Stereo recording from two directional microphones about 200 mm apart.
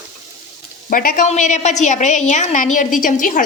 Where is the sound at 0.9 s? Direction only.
45° left (ahead or behind).